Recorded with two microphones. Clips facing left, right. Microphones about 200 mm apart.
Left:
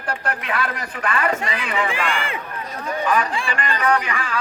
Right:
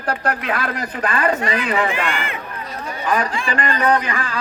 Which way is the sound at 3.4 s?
35° right (ahead or behind).